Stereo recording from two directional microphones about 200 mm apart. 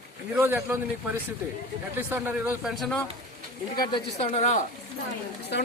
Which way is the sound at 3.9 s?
35° left (ahead or behind).